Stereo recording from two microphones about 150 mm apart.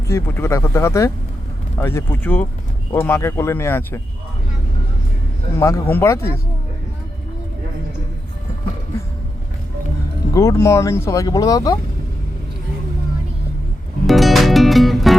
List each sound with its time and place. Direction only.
0.1 s speech: 15° left (ahead or behind)
5.5 s speech: 20° left (ahead or behind)
10.3 s speech: 20° left (ahead or behind)
14.1 s music: centre (ahead or behind)